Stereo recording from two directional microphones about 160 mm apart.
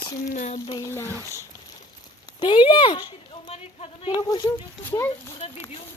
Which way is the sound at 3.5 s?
40° left (ahead or behind).